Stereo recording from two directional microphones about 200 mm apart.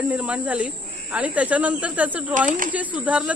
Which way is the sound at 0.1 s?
5° right (ahead or behind).